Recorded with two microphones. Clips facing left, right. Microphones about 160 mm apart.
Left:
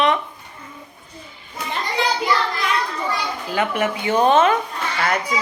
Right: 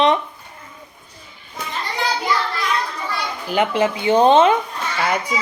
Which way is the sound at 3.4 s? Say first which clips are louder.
Right 4 dB; 20° right (ahead or behind).